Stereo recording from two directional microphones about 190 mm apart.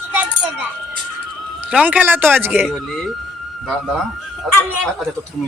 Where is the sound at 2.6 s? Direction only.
Centre (ahead or behind).